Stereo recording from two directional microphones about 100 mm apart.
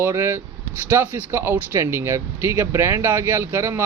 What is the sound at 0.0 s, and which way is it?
A man's voice, 25° right (ahead or behind).